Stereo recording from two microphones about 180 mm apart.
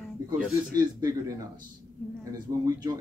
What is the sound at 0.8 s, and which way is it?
Speech, 20° right (ahead or behind).